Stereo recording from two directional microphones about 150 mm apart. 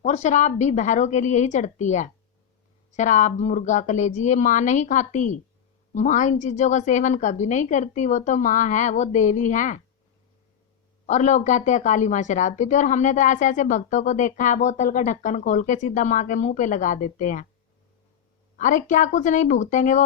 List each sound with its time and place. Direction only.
0.0 s a woman's voice: 50° left (ahead or behind)
11.0 s a woman's voice: 50° left (ahead or behind)
18.5 s a woman's voice: 55° left (ahead or behind)